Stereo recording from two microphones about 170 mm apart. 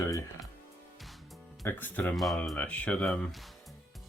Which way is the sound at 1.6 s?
10° left (ahead or behind).